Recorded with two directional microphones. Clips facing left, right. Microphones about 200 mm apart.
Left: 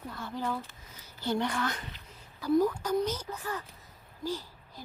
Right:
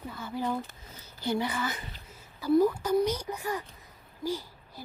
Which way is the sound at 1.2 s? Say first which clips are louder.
Even; 10° right (ahead or behind).